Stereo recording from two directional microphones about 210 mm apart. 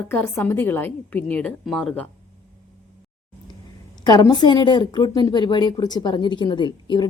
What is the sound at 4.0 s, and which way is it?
A woman's voice, 20° left (ahead or behind).